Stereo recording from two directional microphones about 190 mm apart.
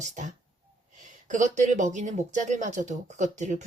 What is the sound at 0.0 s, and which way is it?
Speech, 40° right (ahead or behind).